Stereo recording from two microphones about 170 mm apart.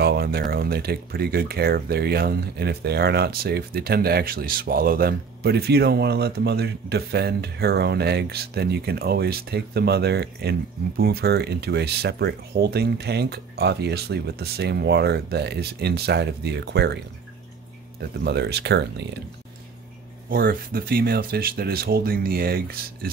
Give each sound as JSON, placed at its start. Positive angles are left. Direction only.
{"t": 0.0, "sound": "speech", "side_deg": -65}
{"t": 18.2, "sound": "speech", "side_deg": -80}
{"t": 20.2, "sound": "speech", "side_deg": -60}